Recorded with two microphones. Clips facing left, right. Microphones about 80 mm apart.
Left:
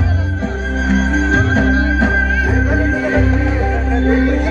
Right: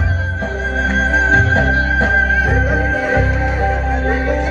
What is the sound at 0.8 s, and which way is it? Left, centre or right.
Music, right.